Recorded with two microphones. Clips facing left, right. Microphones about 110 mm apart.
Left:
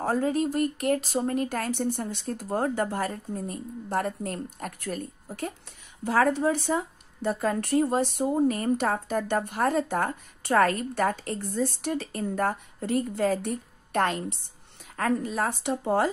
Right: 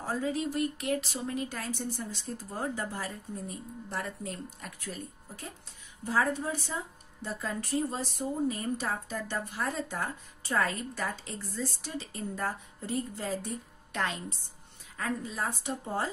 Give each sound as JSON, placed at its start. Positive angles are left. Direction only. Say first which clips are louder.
{"t": 0.0, "sound": "speech", "louder": "left 7 dB", "side_deg": 55}
{"t": 6.0, "sound": "a woman's voice", "louder": "left 7 dB", "side_deg": 75}